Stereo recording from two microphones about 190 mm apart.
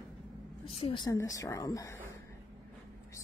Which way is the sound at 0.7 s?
30° left (ahead or behind).